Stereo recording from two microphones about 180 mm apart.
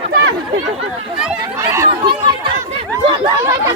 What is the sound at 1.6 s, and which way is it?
Chatter, 15° right (ahead or behind).